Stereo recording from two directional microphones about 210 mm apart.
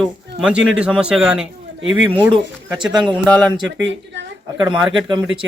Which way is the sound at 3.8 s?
60° right (ahead or behind).